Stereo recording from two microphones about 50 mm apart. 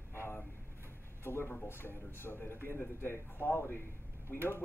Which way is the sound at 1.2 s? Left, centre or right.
Left.